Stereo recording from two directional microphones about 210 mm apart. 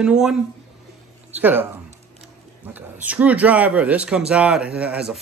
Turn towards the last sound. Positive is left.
turn(degrees=-5)  # may be behind; listen again after turning